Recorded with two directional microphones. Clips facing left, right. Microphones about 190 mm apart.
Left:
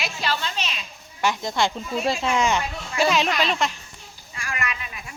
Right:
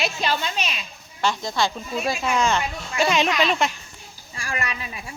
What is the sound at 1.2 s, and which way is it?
Speech, 20° left (ahead or behind).